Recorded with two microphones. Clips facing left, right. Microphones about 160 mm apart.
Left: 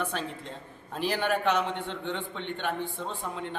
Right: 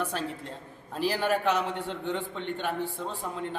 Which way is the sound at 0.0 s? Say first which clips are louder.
Right 1 dB; 5° right (ahead or behind).